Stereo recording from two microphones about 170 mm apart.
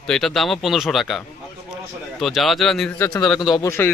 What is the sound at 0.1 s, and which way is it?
A man's voice, centre (ahead or behind).